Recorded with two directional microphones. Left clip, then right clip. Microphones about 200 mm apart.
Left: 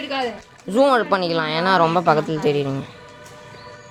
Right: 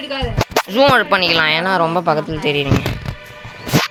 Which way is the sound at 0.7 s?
10° left (ahead or behind).